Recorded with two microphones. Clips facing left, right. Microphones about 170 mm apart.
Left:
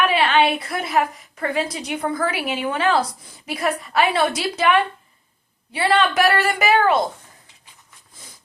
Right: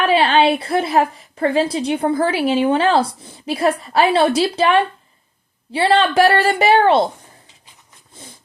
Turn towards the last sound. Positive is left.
turn(degrees=-30)  # may be behind; listen again after turning